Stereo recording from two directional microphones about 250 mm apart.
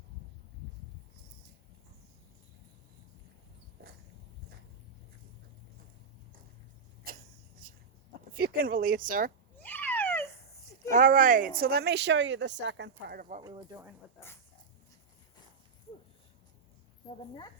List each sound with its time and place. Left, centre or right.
7.1 s a sound: right
8.3 s speech: right
9.6 s a sound: centre
10.9 s speech: right
13.4 s speech: centre
17.2 s speech: centre